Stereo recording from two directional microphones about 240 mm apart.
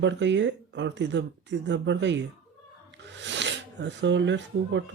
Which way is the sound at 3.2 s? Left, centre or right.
Right.